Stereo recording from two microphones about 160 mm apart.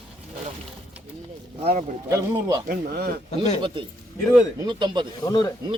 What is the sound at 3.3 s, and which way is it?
Speech, 40° left (ahead or behind).